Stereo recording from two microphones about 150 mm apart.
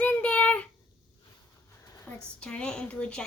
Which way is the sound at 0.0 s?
10° left (ahead or behind).